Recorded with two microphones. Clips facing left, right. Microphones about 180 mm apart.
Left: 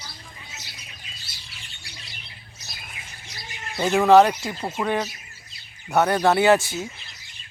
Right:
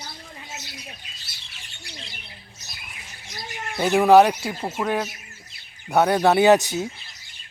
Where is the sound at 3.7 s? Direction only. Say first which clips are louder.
Right 1 dB; 10° right (ahead or behind).